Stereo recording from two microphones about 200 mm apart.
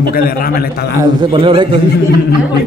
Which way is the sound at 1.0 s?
25° right (ahead or behind).